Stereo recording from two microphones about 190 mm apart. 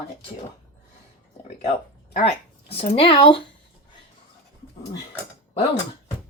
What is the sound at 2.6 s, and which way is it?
Speech, 30° left (ahead or behind).